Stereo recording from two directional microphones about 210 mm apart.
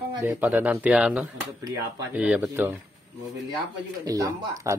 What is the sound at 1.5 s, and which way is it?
Speech, 15° right (ahead or behind).